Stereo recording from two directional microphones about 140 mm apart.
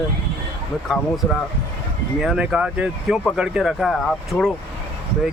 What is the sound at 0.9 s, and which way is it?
Speech, centre (ahead or behind).